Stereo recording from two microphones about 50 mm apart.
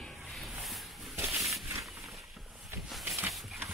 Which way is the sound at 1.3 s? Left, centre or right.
Centre.